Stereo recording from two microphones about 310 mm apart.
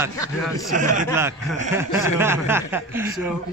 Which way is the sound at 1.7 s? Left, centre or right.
Centre.